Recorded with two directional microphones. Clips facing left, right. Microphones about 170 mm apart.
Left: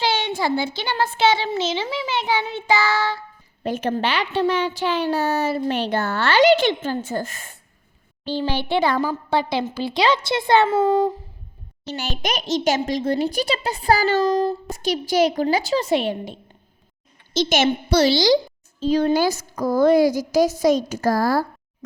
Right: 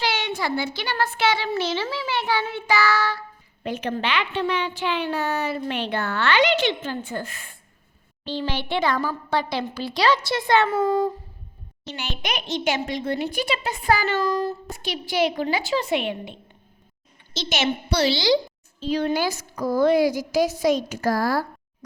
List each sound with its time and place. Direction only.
0.0 s a child's voice: 25° left (ahead or behind)
3.6 s a woman's voice: 40° left (ahead or behind)
11.9 s a woman's voice: 40° left (ahead or behind)
14.3 s a child's voice: 20° left (ahead or behind)
14.7 s a woman's voice: 40° left (ahead or behind)